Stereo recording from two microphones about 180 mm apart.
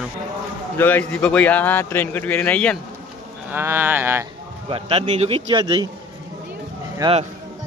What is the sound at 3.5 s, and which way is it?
Speech, 10° right (ahead or behind).